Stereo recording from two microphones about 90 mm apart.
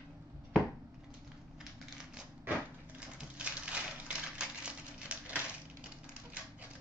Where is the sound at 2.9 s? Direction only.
10° right (ahead or behind).